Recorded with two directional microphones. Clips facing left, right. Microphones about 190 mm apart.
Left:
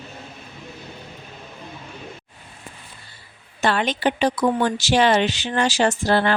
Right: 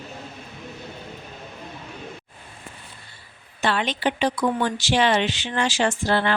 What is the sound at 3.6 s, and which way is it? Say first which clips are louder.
Speech: left 3 dB; 45° left (ahead or behind).